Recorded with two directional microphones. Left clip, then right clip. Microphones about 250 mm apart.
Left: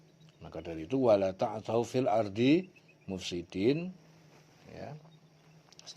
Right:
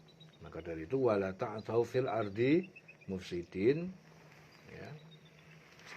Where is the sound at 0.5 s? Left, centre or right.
Left.